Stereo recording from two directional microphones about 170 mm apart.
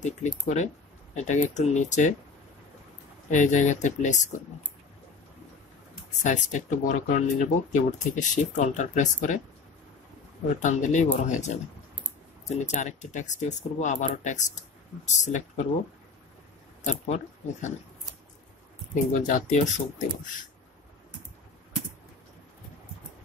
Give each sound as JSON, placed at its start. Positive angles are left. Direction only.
{"t": 0.0, "sound": "speech", "side_deg": 45}
{"t": 3.3, "sound": "speech", "side_deg": 45}
{"t": 6.1, "sound": "speech", "side_deg": 45}
{"t": 10.6, "sound": "speech", "side_deg": 45}
{"t": 16.8, "sound": "speech", "side_deg": 45}
{"t": 19.1, "sound": "speech", "side_deg": 50}